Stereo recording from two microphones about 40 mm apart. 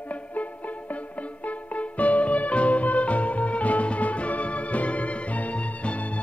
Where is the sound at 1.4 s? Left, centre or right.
Left.